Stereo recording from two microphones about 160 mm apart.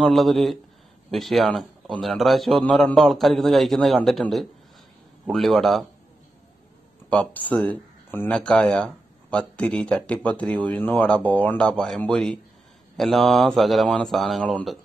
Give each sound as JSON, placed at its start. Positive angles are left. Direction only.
{"t": 0.0, "sound": "a man's voice", "side_deg": 0}
{"t": 7.1, "sound": "a man's voice", "side_deg": 10}